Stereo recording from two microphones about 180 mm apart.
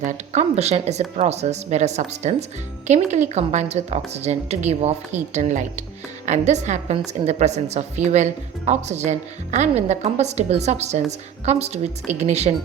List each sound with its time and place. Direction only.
0.0 s a woman's voice: 40° right (ahead or behind)